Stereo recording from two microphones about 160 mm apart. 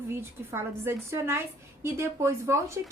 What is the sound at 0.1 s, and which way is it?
A woman's voice, 15° right (ahead or behind).